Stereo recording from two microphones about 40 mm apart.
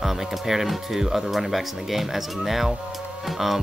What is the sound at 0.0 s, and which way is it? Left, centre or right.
Speech, centre.